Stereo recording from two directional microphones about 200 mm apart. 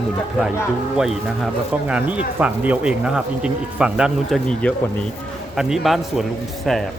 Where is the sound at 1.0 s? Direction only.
Centre (ahead or behind).